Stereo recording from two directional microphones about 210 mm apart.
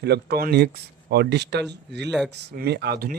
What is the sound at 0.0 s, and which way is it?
Speech, 50° right (ahead or behind).